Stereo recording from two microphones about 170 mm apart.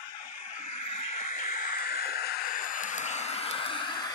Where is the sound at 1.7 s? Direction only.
60° left (ahead or behind); by 4.0 s 30° left (ahead or behind).